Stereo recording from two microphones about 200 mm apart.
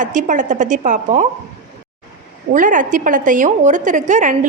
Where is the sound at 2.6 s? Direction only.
40° right (ahead or behind).